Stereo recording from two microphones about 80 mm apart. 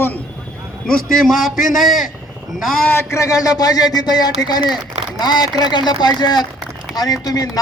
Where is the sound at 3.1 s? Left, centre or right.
Left.